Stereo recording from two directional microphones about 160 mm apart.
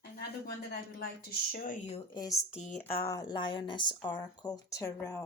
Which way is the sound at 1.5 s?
65° left (ahead or behind).